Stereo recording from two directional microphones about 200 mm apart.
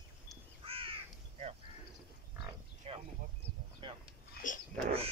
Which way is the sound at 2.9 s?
30° right (ahead or behind).